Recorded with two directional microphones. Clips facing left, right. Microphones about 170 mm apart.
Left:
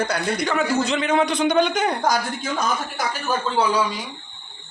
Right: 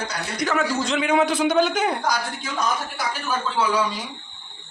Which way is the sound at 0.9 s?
10° right (ahead or behind).